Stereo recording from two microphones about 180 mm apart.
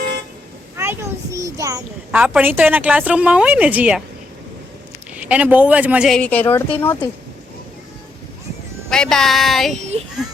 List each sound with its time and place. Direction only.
0.8 s speech: 15° right (ahead or behind)
2.1 s speech: 5° right (ahead or behind)
5.1 s speech: 10° right (ahead or behind)
6.1 s speech: 10° left (ahead or behind)
8.9 s speech: 5° left (ahead or behind)